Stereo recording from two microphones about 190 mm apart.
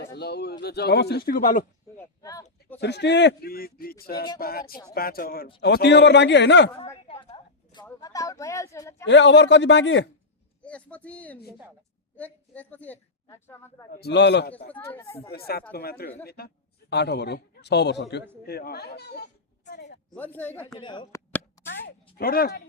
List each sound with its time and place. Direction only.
0.2 s a man's voice: 60° left (ahead or behind)
2.0 s a sound: 20° left (ahead or behind)
2.7 s a man's voice: 60° left (ahead or behind)
6.7 s a sound: 30° left (ahead or behind)
8.0 s speech: 15° left (ahead or behind)
9.0 s a man's voice: 70° left (ahead or behind)
10.6 s a woman's voice: 5° left (ahead or behind)
13.9 s a man's voice: 60° left (ahead or behind)
14.7 s speech: 10° left (ahead or behind)
15.7 s a man's voice: 55° left (ahead or behind)
20.1 s speech: 10° left (ahead or behind)
20.7 s speech: 25° left (ahead or behind)
21.3 s a sound: 10° left (ahead or behind)
22.2 s speech: 50° left (ahead or behind)